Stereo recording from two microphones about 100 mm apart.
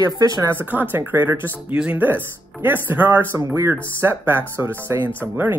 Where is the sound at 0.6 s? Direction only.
20° right (ahead or behind).